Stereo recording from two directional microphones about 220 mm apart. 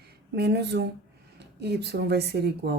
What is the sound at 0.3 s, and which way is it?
A woman's voice, 50° right (ahead or behind).